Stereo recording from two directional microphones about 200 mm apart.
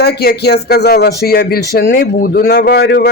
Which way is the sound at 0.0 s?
55° left (ahead or behind).